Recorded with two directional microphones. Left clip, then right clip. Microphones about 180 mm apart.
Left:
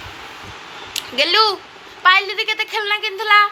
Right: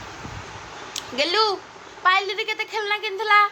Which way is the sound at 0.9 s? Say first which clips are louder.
Left 6 dB; 10° right (ahead or behind).